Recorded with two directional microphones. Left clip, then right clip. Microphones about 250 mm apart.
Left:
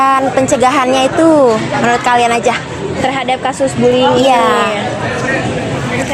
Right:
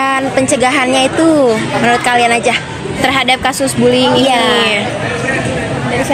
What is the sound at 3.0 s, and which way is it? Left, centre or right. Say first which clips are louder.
A woman's voice: right 3 dB; right.